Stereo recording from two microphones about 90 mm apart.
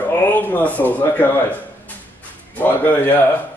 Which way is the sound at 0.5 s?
20° left (ahead or behind).